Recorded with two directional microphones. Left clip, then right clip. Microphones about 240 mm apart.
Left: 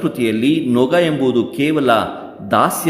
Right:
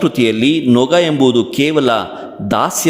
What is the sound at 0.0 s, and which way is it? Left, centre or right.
A man's voice, right.